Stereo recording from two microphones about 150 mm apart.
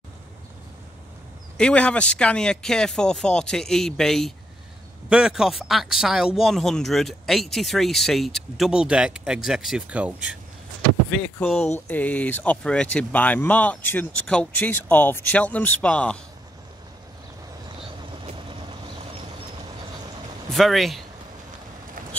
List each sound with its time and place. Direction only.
1.6 s speech: 10° left (ahead or behind); by 10.4 s 10° right (ahead or behind)
11.9 s speech: 10° left (ahead or behind)
17.7 s vehicle: 35° right (ahead or behind)
20.5 s speech: centre (ahead or behind)